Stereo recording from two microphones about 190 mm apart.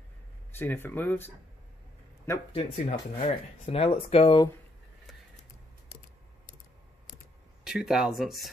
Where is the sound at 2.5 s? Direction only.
30° left (ahead or behind).